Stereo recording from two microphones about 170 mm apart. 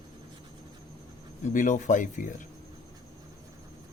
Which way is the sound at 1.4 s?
50° left (ahead or behind).